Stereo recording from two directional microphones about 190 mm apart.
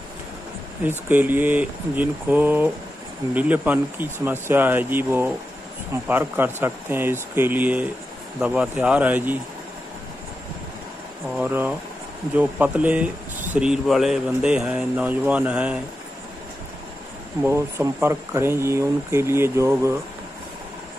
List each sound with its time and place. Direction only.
0.8 s speech: 10° right (ahead or behind)
11.3 s speech: 10° right (ahead or behind)
17.4 s speech: 15° right (ahead or behind)